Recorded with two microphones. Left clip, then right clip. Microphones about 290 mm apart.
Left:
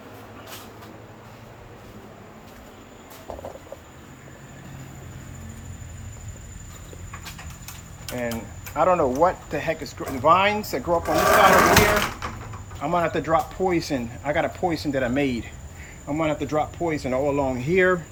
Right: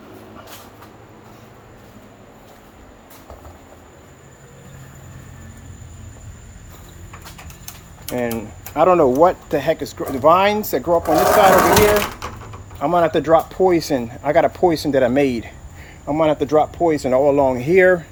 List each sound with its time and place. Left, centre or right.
8.0 s speech: right; by 18.0 s centre